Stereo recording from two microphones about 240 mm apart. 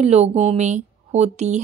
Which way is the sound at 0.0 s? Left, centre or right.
Right.